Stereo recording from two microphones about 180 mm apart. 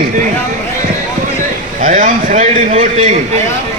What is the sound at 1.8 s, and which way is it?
A man's voice, 45° right (ahead or behind).